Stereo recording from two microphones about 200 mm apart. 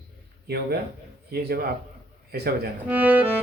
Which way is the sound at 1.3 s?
50° right (ahead or behind).